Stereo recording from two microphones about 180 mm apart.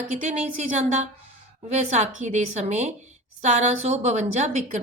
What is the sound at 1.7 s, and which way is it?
A woman's voice, 40° right (ahead or behind).